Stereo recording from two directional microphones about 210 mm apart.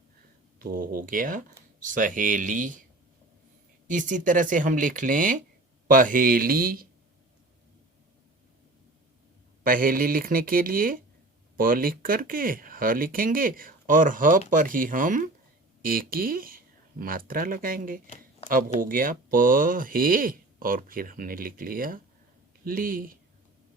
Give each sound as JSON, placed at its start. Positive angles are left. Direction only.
{"t": 0.6, "sound": "speech", "side_deg": -40}
{"t": 3.8, "sound": "speech", "side_deg": -40}
{"t": 9.6, "sound": "speech", "side_deg": -40}